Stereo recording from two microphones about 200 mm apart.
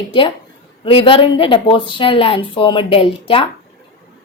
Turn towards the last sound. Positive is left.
turn(degrees=25)  # may be behind; listen again after turning